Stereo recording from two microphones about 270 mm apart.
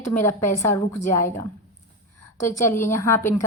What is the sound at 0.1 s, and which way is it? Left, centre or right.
Speech, centre.